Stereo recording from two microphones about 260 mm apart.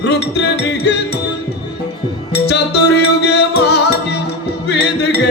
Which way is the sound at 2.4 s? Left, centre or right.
Left.